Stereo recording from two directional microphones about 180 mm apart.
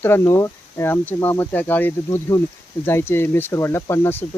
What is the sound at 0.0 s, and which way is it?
Speech, 15° left (ahead or behind).